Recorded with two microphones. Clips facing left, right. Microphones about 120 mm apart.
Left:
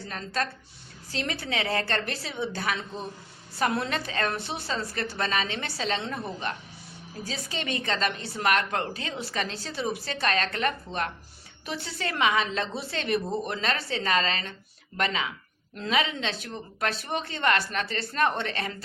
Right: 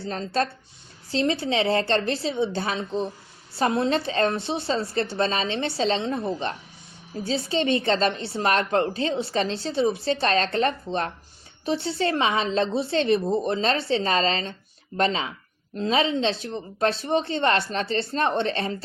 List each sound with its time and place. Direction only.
0.0 s a woman's voice: 30° right (ahead or behind)